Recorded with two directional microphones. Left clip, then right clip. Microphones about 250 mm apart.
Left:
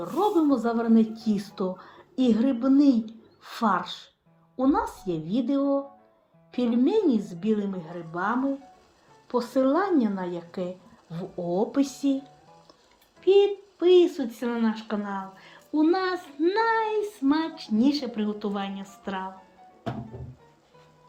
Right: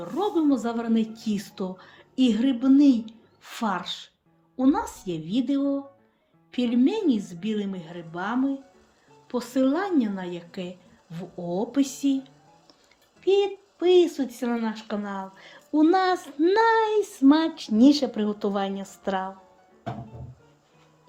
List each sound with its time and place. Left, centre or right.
0.0 s speech: centre
13.2 s speech: centre